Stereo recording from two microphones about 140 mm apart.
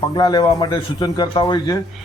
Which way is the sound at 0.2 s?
30° left (ahead or behind).